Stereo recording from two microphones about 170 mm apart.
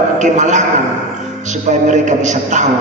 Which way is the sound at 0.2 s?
45° right (ahead or behind).